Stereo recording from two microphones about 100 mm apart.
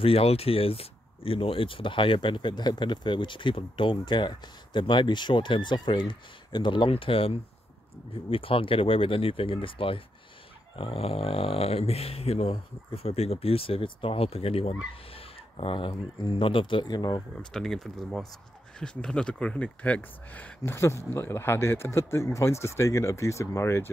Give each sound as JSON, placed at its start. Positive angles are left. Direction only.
{"t": 0.0, "sound": "speech", "side_deg": 75}
{"t": 6.9, "sound": "speech", "side_deg": 65}
{"t": 10.8, "sound": "speech", "side_deg": 75}
{"t": 15.1, "sound": "speech", "side_deg": 65}
{"t": 17.4, "sound": "speech", "side_deg": 5}
{"t": 20.7, "sound": "speech", "side_deg": 25}